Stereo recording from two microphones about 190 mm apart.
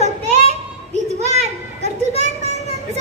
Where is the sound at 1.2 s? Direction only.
35° right (ahead or behind).